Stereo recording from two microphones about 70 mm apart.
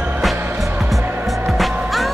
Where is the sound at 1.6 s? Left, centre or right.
Centre.